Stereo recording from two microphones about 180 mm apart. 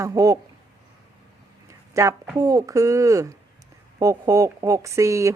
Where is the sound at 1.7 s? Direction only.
15° right (ahead or behind).